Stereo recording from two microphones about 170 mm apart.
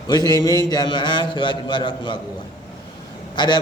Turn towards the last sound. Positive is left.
turn(degrees=25)  # may be behind; listen again after turning